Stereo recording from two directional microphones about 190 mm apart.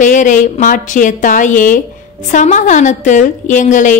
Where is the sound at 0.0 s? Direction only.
40° left (ahead or behind).